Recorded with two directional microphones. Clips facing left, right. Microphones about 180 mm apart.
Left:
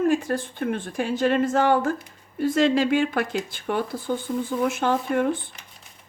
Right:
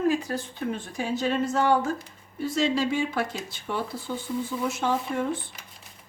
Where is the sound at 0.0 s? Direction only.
50° left (ahead or behind).